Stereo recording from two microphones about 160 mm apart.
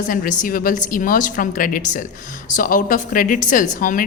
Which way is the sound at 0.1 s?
60° left (ahead or behind).